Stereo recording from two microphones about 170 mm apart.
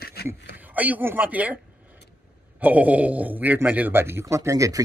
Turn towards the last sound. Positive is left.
turn(degrees=-20)  # may be behind; listen again after turning